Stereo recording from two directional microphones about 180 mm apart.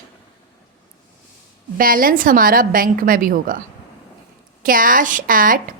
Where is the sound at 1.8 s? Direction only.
55° right (ahead or behind).